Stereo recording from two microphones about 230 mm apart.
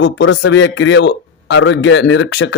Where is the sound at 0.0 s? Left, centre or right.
Left.